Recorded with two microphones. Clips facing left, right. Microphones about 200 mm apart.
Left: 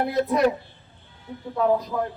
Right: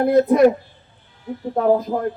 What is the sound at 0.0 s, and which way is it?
Speech, 50° right (ahead or behind).